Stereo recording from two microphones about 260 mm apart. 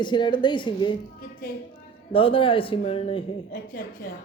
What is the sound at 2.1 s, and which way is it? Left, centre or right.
A woman's voice, left.